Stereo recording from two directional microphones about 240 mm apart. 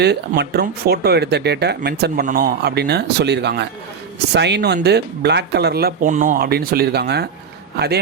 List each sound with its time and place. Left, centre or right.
0.0 s speech: right